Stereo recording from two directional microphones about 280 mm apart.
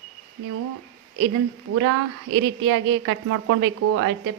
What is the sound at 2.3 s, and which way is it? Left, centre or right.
A woman's voice, right.